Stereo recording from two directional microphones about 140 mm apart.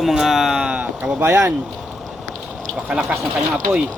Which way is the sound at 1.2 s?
20° right (ahead or behind).